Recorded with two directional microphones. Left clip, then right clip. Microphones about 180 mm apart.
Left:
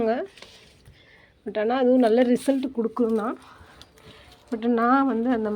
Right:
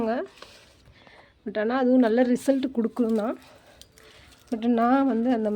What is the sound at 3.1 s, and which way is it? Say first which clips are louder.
Speech: left 1 dB; 25° right (ahead or behind).